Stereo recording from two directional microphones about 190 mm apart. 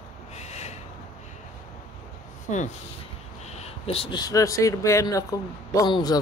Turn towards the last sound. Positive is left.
turn(degrees=20)  # may be behind; listen again after turning